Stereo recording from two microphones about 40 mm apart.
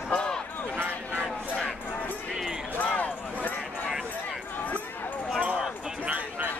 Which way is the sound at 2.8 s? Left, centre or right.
Left.